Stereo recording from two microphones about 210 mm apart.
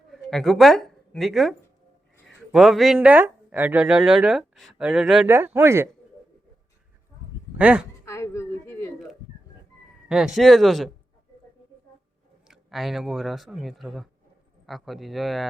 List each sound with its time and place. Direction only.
0.1 s speech: centre (ahead or behind)
7.6 s speech: 5° right (ahead or behind)
8.0 s a sound: 15° left (ahead or behind)
10.1 s speech: centre (ahead or behind)
12.5 s speech: centre (ahead or behind)